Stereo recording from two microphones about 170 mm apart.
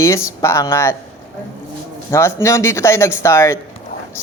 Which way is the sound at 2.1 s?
15° left (ahead or behind).